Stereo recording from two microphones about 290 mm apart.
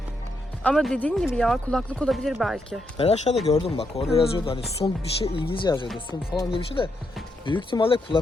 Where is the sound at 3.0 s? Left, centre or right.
Left.